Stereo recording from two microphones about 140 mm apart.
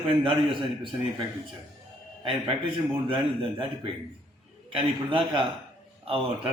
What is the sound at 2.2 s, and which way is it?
A man's voice, 40° right (ahead or behind).